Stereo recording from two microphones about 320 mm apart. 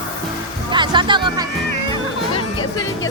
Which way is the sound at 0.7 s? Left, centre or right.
Centre.